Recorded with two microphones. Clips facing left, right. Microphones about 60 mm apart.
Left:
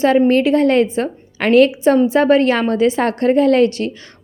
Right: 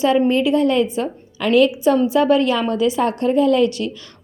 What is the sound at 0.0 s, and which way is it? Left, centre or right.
Speech, left.